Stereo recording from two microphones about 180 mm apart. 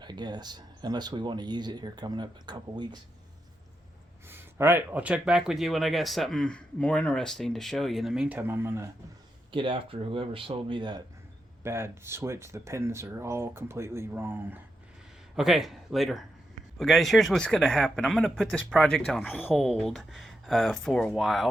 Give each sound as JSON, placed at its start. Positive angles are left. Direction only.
{"t": 0.0, "sound": "speech", "side_deg": -25}
{"t": 4.3, "sound": "speech", "side_deg": -10}
{"t": 9.5, "sound": "speech", "side_deg": -30}
{"t": 11.6, "sound": "speech", "side_deg": -15}